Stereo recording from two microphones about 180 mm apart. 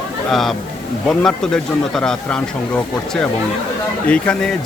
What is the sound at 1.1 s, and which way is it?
Speech, 5° left (ahead or behind).